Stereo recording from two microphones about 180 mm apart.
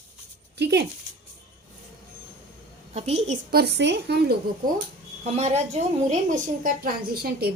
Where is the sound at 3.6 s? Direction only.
75° right (ahead or behind).